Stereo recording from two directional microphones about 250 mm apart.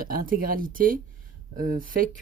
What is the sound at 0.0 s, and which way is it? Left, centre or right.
Speech, right.